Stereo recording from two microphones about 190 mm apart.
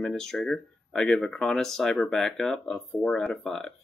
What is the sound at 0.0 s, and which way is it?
Speech, 5° left (ahead or behind).